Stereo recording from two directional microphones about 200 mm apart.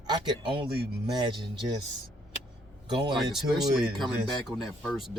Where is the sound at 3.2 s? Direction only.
Centre (ahead or behind).